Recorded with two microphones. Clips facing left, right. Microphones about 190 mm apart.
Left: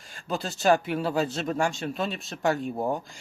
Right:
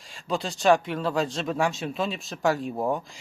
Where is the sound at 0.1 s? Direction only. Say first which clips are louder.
Right 2 dB; centre (ahead or behind).